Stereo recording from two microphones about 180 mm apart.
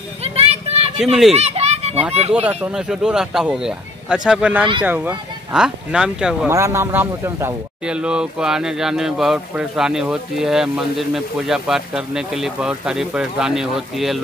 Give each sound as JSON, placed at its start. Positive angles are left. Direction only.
{"t": 0.2, "sound": "a sound", "side_deg": -35}
{"t": 1.3, "sound": "children playing", "side_deg": -35}
{"t": 2.1, "sound": "speech", "side_deg": -35}
{"t": 2.4, "sound": "speech", "side_deg": -5}
{"t": 6.5, "sound": "a man's voice", "side_deg": -15}